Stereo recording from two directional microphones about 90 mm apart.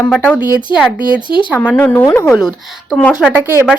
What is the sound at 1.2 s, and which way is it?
Speech, 65° left (ahead or behind).